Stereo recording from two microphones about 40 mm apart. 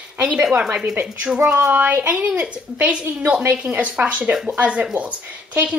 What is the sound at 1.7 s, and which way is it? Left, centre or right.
Child singing, right.